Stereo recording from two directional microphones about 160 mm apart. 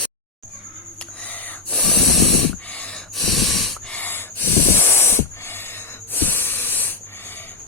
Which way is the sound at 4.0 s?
15° left (ahead or behind).